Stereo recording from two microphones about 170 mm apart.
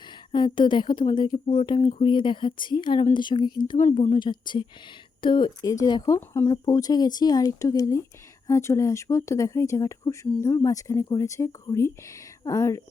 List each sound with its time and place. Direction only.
0.3 s speech: 30° left (ahead or behind)
3.8 s a woman's voice: 45° left (ahead or behind)
4.1 s speech: 25° left (ahead or behind)